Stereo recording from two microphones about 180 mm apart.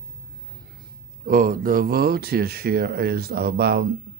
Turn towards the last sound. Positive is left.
turn(degrees=-60)  # may be behind; listen again after turning